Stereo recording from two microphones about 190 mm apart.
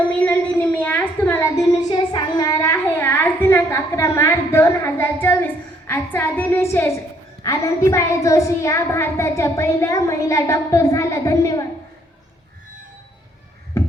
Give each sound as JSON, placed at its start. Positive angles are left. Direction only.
{"t": 0.1, "sound": "a sound", "side_deg": 5}
{"t": 5.9, "sound": "a woman's voice", "side_deg": 10}
{"t": 13.7, "sound": "music", "side_deg": 15}